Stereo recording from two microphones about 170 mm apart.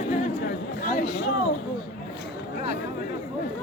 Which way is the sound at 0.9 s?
50° left (ahead or behind).